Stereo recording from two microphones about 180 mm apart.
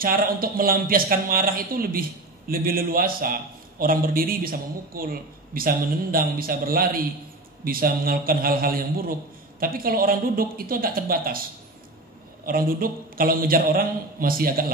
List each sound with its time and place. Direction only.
0.0 s speech: 55° right (ahead or behind)
12.4 s speech: 55° right (ahead or behind)